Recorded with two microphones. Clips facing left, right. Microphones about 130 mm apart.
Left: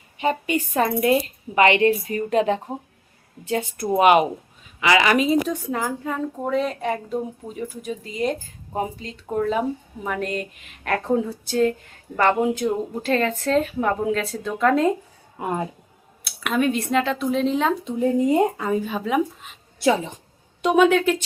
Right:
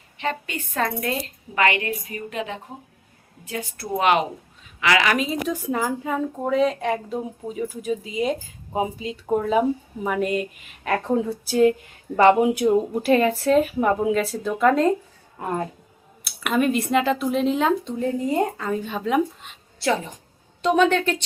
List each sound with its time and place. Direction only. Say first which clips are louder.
0.2 s a woman's voice: left 6 dB; 10° left (ahead or behind)
2.1 s speech: left 9 dB; 35° left (ahead or behind)
3.6 s a woman's voice: left 5 dB; 15° left (ahead or behind)
12.1 s a woman's voice: right 4 dB; 15° right (ahead or behind)
15.4 s a woman's voice: left 1 dB; 10° left (ahead or behind)
16.2 s a sound: even; centre (ahead or behind)
16.9 s a woman's voice: right 1 dB; 5° right (ahead or behind)
18.5 s a woman's voice: left 3 dB; 10° left (ahead or behind)
20.6 s a woman's voice: left 2 dB; 10° left (ahead or behind)